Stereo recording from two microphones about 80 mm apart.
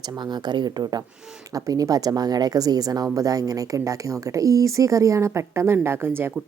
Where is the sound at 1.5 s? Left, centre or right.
Right.